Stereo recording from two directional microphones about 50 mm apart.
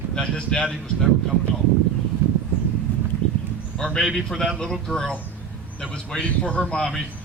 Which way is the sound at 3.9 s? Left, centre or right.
Centre.